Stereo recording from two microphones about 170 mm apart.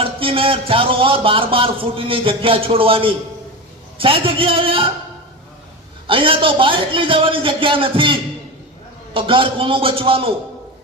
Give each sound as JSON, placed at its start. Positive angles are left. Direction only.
{"t": 0.0, "sound": "speech", "side_deg": -30}
{"t": 6.1, "sound": "speech", "side_deg": -30}